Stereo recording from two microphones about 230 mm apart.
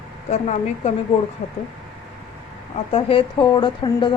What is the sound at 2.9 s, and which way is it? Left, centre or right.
Speech, left.